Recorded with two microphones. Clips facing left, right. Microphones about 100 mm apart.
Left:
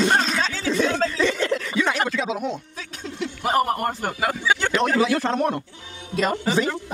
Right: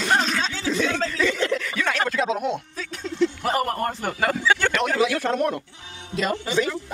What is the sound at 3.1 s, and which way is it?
A man's voice, 15° left (ahead or behind).